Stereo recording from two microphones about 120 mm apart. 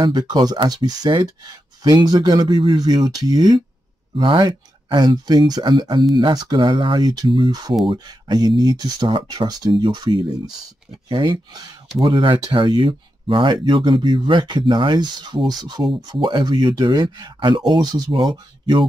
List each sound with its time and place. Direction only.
0.0 s speech: 35° right (ahead or behind)